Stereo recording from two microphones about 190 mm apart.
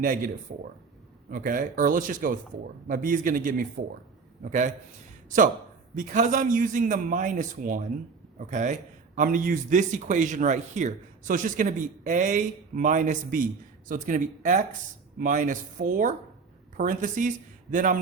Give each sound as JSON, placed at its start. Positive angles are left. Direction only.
{"t": 0.0, "sound": "a man's voice", "side_deg": -45}
{"t": 1.3, "sound": "a man's voice", "side_deg": -45}
{"t": 5.9, "sound": "a man's voice", "side_deg": -40}